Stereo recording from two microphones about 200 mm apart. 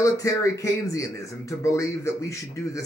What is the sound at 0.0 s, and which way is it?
Speech, 15° left (ahead or behind).